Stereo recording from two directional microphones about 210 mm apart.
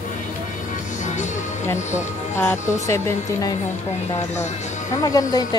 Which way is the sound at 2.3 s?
10° left (ahead or behind).